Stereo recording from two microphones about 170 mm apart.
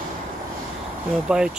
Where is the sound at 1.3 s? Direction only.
5° right (ahead or behind).